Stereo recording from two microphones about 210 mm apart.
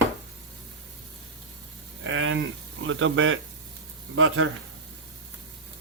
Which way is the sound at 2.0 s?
70° right (ahead or behind).